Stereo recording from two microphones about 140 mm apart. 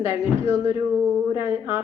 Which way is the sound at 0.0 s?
20° right (ahead or behind).